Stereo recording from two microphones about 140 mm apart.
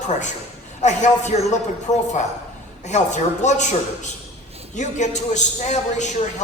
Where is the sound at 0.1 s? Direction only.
60° left (ahead or behind).